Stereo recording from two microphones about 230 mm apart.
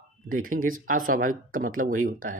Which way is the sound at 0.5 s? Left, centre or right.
Right.